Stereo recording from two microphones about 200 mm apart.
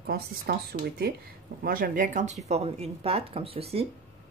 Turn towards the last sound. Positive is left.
turn(degrees=-30)  # may be behind; listen again after turning